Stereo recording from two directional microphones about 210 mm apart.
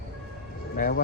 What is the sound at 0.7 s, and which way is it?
Speech, 45° left (ahead or behind).